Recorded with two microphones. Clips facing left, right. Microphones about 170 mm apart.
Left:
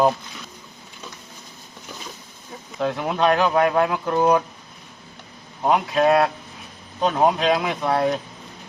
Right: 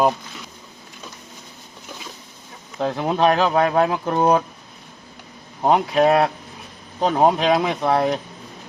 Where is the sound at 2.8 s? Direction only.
30° right (ahead or behind).